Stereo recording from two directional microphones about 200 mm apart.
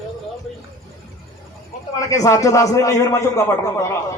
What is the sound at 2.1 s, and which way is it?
A man's voice, 15° left (ahead or behind).